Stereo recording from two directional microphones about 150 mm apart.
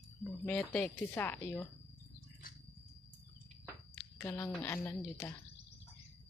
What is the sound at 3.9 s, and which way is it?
A woman's voice, 15° left (ahead or behind).